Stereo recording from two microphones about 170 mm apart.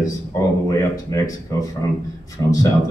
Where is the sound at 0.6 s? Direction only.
20° left (ahead or behind).